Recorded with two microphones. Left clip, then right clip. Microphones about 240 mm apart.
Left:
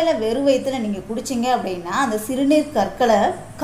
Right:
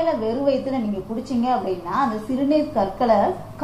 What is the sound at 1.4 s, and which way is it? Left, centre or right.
A woman's voice, left.